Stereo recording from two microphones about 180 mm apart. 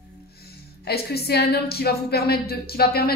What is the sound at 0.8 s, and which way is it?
A woman's voice, 60° left (ahead or behind).